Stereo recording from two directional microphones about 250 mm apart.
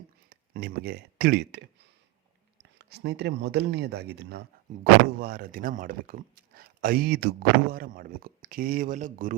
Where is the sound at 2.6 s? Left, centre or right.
Right.